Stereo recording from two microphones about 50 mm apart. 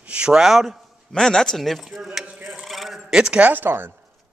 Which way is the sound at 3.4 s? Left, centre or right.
Right.